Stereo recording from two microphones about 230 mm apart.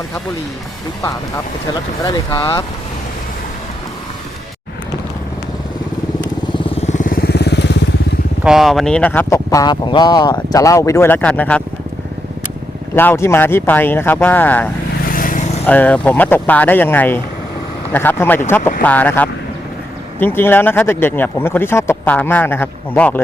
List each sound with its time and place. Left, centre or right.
2.0 s speech: centre
6.7 s vehicle: left
8.4 s speech: centre
13.0 s speech: centre
15.1 s vehicle: left
15.6 s speech: centre